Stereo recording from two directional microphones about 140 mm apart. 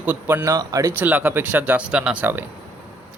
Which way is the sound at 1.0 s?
15° right (ahead or behind).